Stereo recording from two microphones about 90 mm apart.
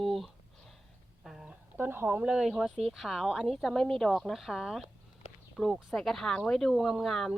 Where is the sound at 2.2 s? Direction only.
10° right (ahead or behind).